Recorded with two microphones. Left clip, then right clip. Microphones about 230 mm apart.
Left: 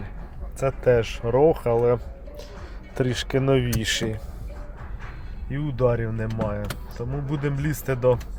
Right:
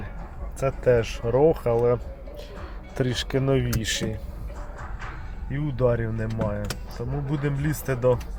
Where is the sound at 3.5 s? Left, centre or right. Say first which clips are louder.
Left 3 dB; left.